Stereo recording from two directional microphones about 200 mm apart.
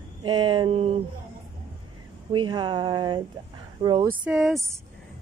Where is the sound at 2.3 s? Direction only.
25° right (ahead or behind).